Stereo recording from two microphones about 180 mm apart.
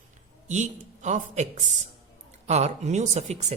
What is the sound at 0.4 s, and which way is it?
Speech, 40° right (ahead or behind).